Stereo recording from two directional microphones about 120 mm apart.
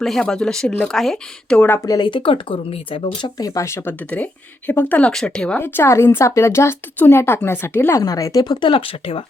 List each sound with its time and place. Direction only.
0.0 s speech: 5° left (ahead or behind)
1.8 s speech: 35° left (ahead or behind); by 3.1 s 50° left (ahead or behind)
3.2 s speech: 35° left (ahead or behind); by 5.5 s 10° left (ahead or behind)
5.5 s speech: 20° left (ahead or behind); by 9.2 s 50° left (ahead or behind)